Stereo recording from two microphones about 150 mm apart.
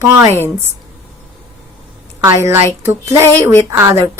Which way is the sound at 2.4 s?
20° right (ahead or behind).